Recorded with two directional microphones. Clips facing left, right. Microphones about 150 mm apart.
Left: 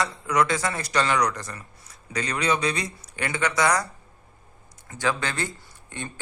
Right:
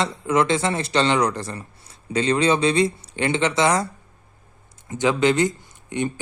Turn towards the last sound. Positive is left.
turn(degrees=-20)  # may be behind; listen again after turning